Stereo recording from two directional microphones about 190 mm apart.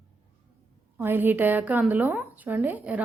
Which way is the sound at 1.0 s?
10° right (ahead or behind).